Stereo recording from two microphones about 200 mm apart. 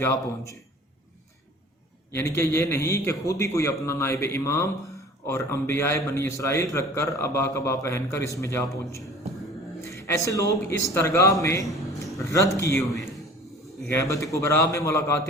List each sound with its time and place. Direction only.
0.0 s a man's voice: 15° left (ahead or behind)
2.1 s a man's voice: 10° left (ahead or behind)
13.8 s a man's voice: 15° left (ahead or behind)